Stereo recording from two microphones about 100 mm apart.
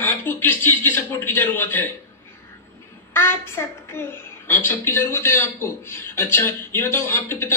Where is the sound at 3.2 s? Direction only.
25° left (ahead or behind).